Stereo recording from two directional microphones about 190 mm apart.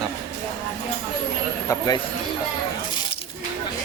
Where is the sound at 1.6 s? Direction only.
15° left (ahead or behind).